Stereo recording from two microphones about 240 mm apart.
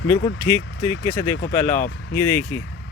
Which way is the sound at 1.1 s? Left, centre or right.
Centre.